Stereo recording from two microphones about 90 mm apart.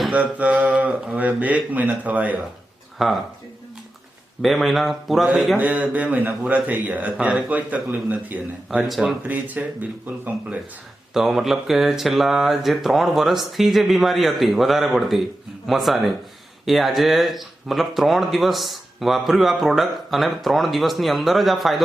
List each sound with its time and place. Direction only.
0.1 s speech: 15° right (ahead or behind)
3.0 s speech: centre (ahead or behind)
4.4 s speech: centre (ahead or behind)
5.5 s speech: 15° right (ahead or behind)
8.7 s speech: 5° right (ahead or behind)
9.2 s speech: 20° right (ahead or behind)
11.1 s speech: 5° right (ahead or behind)